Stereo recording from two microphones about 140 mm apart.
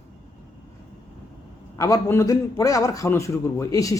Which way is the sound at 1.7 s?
20° left (ahead or behind).